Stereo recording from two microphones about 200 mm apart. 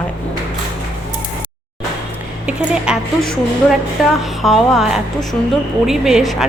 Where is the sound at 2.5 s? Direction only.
5° right (ahead or behind).